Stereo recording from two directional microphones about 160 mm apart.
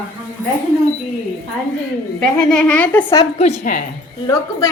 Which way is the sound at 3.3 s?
50° left (ahead or behind).